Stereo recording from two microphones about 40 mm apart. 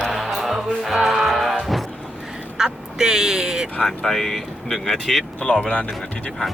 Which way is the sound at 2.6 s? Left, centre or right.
Centre.